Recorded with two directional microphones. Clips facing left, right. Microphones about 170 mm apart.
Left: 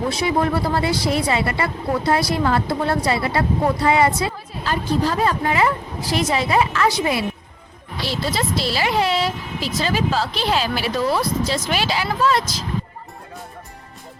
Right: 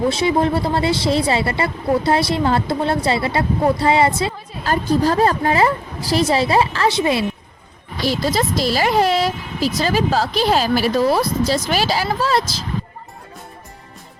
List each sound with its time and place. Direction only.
0.1 s speech: 25° right (ahead or behind)
4.6 s speech: 45° right (ahead or behind); by 7.3 s 25° right (ahead or behind)
8.0 s speech: 45° right (ahead or behind)